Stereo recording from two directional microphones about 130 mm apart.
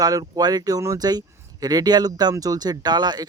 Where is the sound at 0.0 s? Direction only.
30° right (ahead or behind).